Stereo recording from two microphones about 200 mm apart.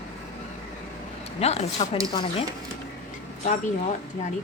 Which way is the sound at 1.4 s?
30° left (ahead or behind).